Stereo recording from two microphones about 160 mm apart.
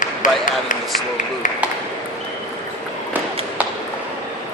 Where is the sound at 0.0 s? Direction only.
55° left (ahead or behind).